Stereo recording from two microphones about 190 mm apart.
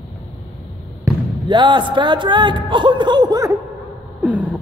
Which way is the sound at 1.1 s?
10° right (ahead or behind).